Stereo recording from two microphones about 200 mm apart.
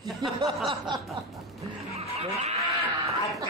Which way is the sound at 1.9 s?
30° right (ahead or behind).